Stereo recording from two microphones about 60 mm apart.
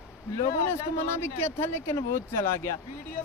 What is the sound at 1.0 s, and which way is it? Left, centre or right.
Speech, left.